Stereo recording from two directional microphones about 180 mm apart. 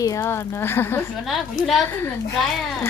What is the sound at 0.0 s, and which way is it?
Speech, 20° left (ahead or behind).